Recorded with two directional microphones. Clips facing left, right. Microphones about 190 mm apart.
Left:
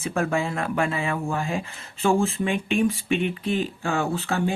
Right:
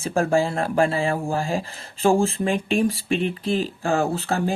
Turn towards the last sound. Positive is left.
turn(degrees=-35)  # may be behind; listen again after turning